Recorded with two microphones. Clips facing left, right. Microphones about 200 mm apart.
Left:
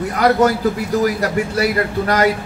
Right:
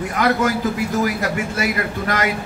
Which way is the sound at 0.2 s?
40° left (ahead or behind).